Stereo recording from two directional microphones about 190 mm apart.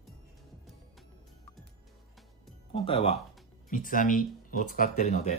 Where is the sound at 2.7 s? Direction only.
30° left (ahead or behind).